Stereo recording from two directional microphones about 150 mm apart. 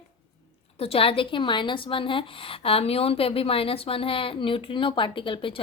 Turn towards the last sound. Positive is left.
turn(degrees=35)  # may be behind; listen again after turning